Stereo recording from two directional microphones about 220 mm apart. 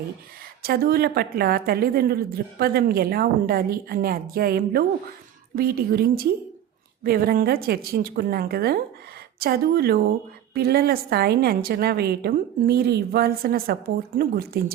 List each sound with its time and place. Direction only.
0.6 s a woman's voice: 45° right (ahead or behind)